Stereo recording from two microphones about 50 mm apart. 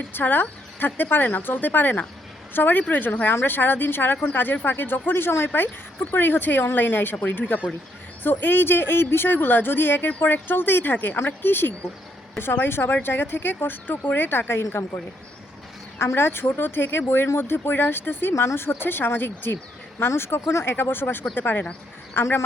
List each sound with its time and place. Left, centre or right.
0.1 s a woman's voice: left
10.9 s a woman's voice: left
11.2 s speech: left
16.1 s speech: left
20.4 s speech: left
20.7 s a woman's voice: left